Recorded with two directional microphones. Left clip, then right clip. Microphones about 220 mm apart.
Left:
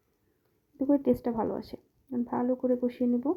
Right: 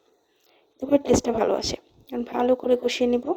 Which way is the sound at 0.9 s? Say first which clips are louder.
Right 7 dB; 50° right (ahead or behind).